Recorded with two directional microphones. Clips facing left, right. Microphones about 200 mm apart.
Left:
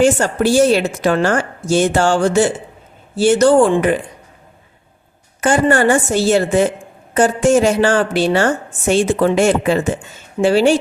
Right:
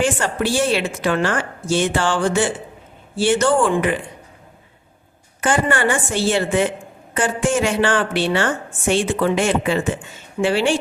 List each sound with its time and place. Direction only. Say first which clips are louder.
0.0 s a woman's voice: left 6 dB; 40° left (ahead or behind)
5.4 s a woman's voice: left 5 dB; 40° left (ahead or behind)